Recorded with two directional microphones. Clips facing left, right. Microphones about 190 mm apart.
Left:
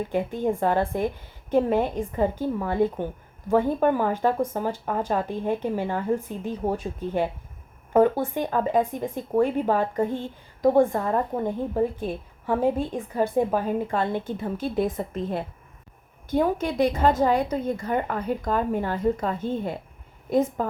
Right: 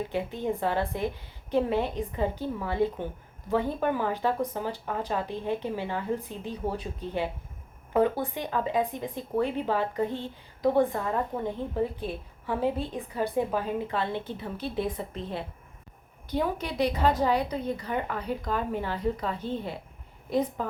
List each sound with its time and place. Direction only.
0.1 s a woman's voice: 50° left (ahead or behind)